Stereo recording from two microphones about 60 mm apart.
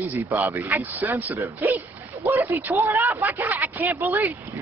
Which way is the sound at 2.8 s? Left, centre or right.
Right.